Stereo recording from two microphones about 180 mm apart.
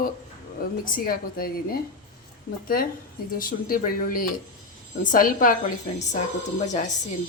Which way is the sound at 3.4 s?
50° left (ahead or behind).